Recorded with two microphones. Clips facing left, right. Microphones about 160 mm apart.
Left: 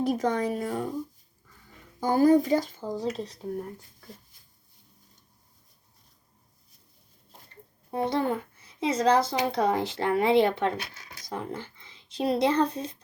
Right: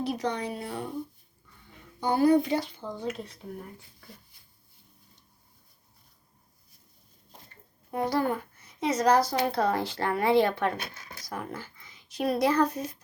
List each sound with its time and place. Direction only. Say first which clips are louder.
0.0 s speech: left 4 dB; 45° left (ahead or behind)
2.0 s speech: left 2 dB; 45° left (ahead or behind)
7.9 s a child's voice: left 1 dB; 25° left (ahead or behind)